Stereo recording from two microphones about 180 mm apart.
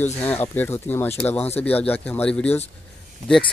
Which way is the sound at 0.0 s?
10° left (ahead or behind).